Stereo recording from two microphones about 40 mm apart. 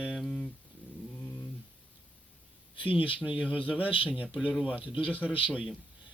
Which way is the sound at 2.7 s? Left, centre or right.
Right.